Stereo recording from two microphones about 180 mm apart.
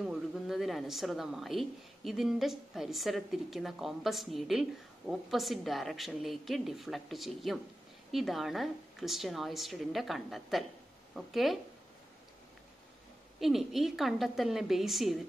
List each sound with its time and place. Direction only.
0.0 s a woman's voice: centre (ahead or behind)
13.4 s a woman's voice: centre (ahead or behind)